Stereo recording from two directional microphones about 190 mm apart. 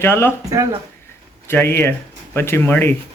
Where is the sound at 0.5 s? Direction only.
20° right (ahead or behind).